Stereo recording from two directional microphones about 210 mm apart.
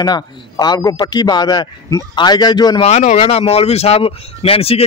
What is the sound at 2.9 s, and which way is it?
Speech, 30° left (ahead or behind).